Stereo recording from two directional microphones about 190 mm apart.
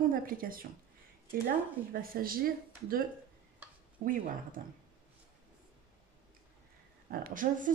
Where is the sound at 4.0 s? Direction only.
50° right (ahead or behind).